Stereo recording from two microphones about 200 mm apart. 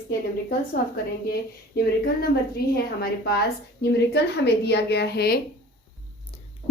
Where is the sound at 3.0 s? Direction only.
50° left (ahead or behind).